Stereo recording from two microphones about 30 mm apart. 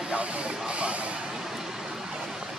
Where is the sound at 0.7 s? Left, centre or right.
Right.